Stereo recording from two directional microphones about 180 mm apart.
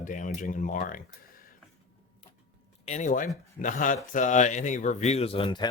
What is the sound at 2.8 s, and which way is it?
Speech, 40° left (ahead or behind).